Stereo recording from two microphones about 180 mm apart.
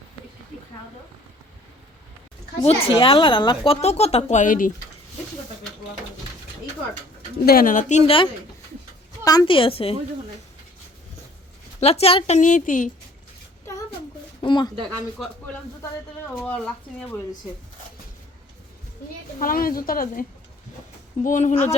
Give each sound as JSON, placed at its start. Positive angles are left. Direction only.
{"t": 2.6, "sound": "a woman's voice", "side_deg": 30}
{"t": 7.4, "sound": "a woman's voice", "side_deg": 50}
{"t": 11.8, "sound": "a woman's voice", "side_deg": 35}
{"t": 14.4, "sound": "speech", "side_deg": 25}
{"t": 16.4, "sound": "speech", "side_deg": 10}
{"t": 19.4, "sound": "a woman's voice", "side_deg": 50}
{"t": 21.2, "sound": "a woman's voice", "side_deg": 45}